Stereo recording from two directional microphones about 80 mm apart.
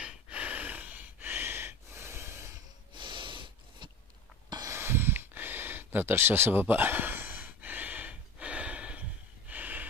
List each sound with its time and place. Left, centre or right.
0.0 s snort: centre; by 2.6 s right
2.9 s snort: right
4.6 s a sound: right; by 9.0 s centre
9.5 s snort: right